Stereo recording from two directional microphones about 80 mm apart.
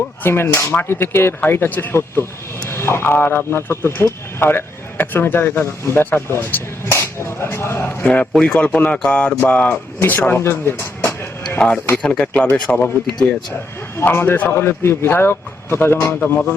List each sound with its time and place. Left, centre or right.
0.2 s a man's voice: left
8.0 s a man's voice: centre
11.6 s speech: centre
14.0 s a man's voice: left